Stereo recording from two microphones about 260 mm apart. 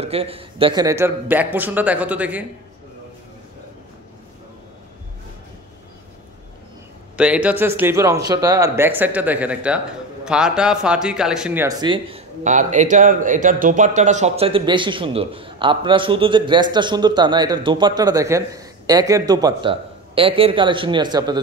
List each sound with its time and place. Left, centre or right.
0.0 s speech: right; by 2.4 s centre
7.2 s speech: centre